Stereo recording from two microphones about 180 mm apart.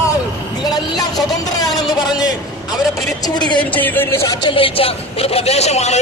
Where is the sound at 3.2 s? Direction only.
25° left (ahead or behind).